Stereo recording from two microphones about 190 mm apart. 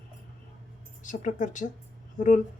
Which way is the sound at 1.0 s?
40° left (ahead or behind).